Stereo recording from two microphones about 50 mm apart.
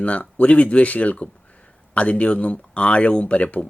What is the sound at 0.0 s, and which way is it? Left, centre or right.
Speech, left.